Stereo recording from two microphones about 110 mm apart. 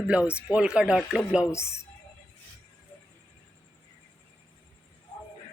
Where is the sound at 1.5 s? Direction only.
25° left (ahead or behind).